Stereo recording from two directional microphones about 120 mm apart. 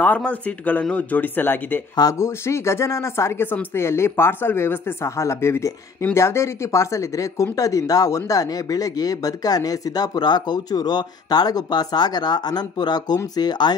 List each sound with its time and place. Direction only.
0.0 s speech: 10° left (ahead or behind)
2.0 s speech: 30° left (ahead or behind)